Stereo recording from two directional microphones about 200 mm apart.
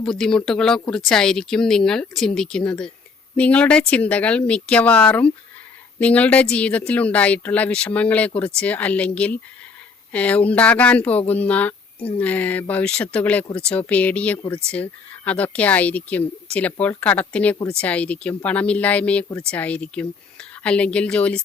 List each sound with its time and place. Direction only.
0.0 s speech: centre (ahead or behind)
11.9 s speech: 25° left (ahead or behind)
12.2 s speech: 5° left (ahead or behind)